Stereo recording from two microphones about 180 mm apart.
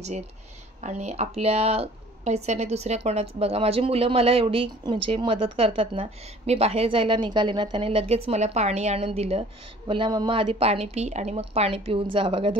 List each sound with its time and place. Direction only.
0.7 s a woman's voice: 40° right (ahead or behind)